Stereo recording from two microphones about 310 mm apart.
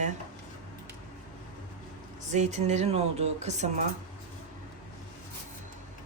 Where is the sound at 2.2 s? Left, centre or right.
Right.